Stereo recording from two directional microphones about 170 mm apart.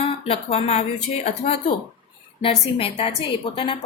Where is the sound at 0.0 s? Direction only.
35° left (ahead or behind).